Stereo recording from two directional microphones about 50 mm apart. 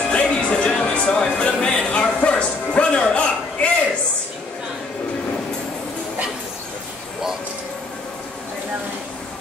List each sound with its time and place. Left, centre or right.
0.1 s speech: centre